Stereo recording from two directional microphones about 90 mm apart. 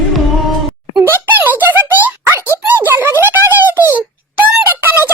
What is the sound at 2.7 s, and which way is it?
Wail, 25° right (ahead or behind).